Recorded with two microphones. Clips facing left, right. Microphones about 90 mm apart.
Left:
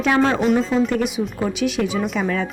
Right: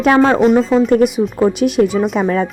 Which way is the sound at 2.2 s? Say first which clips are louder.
Right 6 dB; 35° right (ahead or behind).